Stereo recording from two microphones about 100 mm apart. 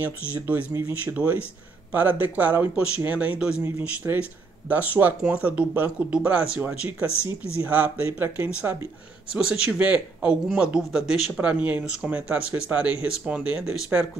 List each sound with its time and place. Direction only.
0.0 s speech: 15° right (ahead or behind)
3.6 s speech: 25° right (ahead or behind)